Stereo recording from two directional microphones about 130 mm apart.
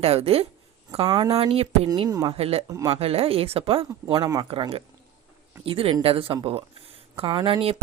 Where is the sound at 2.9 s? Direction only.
50° right (ahead or behind).